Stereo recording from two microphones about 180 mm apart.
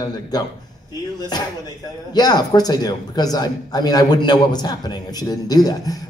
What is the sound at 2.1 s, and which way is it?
A man's voice, 20° left (ahead or behind).